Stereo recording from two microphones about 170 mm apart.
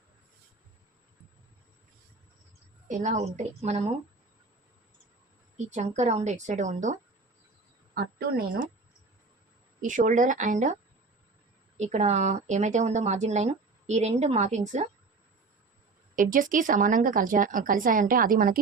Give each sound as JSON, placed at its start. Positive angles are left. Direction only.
{"t": 2.9, "sound": "a woman's voice", "side_deg": -45}
{"t": 5.5, "sound": "speech", "side_deg": -45}
{"t": 7.9, "sound": "speech", "side_deg": -65}
{"t": 9.8, "sound": "speech", "side_deg": -50}
{"t": 11.8, "sound": "speech", "side_deg": -45}
{"t": 16.1, "sound": "speech", "side_deg": -50}